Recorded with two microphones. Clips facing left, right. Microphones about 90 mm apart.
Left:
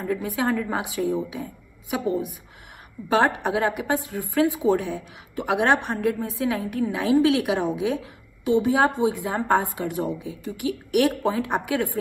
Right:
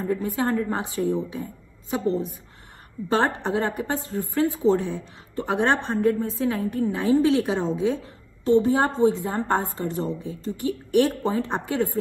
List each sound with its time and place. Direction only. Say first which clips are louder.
0.2 s a woman's voice: even; 15° left (ahead or behind)